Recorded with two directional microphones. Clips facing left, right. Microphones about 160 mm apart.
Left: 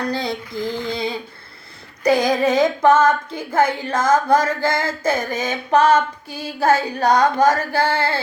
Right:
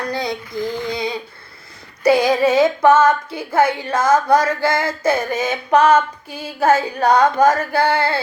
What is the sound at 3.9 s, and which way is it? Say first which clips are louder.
Carnatic music: right 2 dB; 30° right (ahead or behind).